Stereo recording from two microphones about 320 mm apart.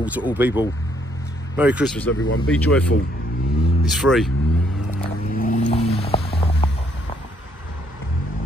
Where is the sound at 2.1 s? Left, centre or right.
Left.